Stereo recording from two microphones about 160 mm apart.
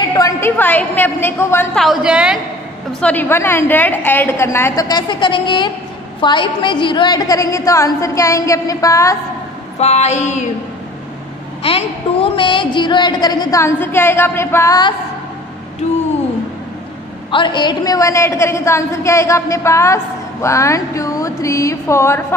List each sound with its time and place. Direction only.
0.1 s a woman's voice: 20° left (ahead or behind)
1.8 s a woman's voice: 5° right (ahead or behind)
2.9 s a woman's voice: 10° left (ahead or behind)
9.8 s a sound: 45° left (ahead or behind)
11.6 s a woman's voice: 35° left (ahead or behind); by 14.8 s 15° left (ahead or behind)
15.8 s a sound: 45° left (ahead or behind)
17.3 s a woman's voice: 30° left (ahead or behind)